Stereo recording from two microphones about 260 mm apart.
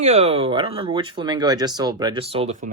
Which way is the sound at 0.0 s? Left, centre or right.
Right.